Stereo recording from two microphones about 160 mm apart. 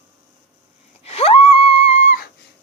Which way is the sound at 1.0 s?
40° left (ahead or behind).